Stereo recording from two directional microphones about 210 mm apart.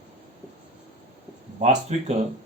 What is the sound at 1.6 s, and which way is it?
Speech, 35° right (ahead or behind).